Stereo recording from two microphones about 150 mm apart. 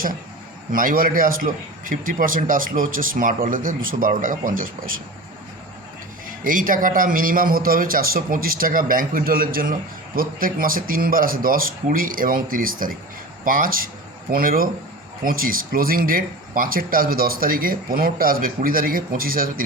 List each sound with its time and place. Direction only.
0.7 s a man's voice: 70° right (ahead or behind)
6.4 s speech: 65° right (ahead or behind)